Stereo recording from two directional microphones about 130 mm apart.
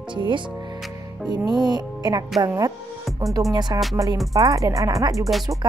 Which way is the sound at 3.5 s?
35° right (ahead or behind).